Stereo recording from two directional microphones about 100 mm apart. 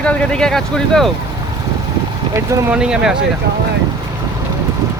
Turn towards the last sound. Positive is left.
turn(degrees=-5)  # may be behind; listen again after turning